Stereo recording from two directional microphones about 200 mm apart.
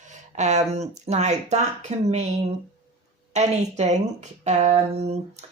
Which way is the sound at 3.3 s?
35° right (ahead or behind).